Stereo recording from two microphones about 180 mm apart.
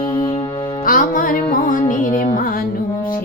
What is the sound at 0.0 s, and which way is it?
Music, 30° left (ahead or behind).